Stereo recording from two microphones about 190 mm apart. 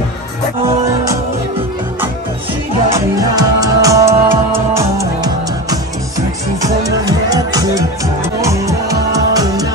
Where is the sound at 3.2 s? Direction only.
20° right (ahead or behind).